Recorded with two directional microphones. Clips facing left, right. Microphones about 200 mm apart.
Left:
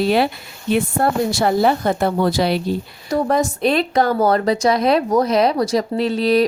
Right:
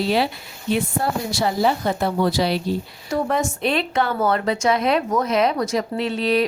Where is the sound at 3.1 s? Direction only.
35° left (ahead or behind).